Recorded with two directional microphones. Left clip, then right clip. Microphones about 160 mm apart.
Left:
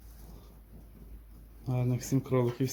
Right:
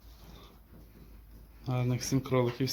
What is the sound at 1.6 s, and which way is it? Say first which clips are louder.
Speech: right 1 dB; 5° left (ahead or behind).